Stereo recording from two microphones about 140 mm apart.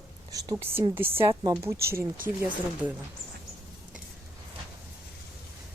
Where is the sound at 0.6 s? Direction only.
15° right (ahead or behind).